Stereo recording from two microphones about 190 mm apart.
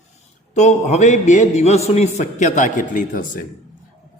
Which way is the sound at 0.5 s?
40° left (ahead or behind).